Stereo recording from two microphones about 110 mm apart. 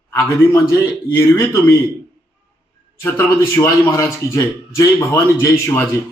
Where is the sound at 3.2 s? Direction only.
25° left (ahead or behind).